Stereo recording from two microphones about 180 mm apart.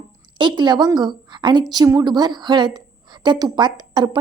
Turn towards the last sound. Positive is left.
turn(degrees=-25)  # may be behind; listen again after turning